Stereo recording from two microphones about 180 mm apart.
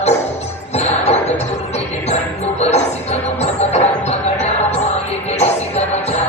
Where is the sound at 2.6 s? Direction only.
35° left (ahead or behind).